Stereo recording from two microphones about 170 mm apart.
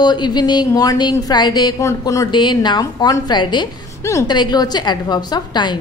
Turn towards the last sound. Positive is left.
turn(degrees=25)  # may be behind; listen again after turning